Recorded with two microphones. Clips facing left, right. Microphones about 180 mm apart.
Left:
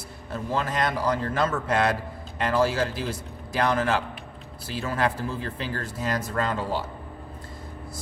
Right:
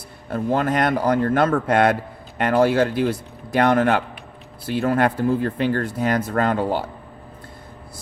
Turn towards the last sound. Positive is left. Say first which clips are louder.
# right 7 dB
turn(degrees=-60)  # may be behind; listen again after turning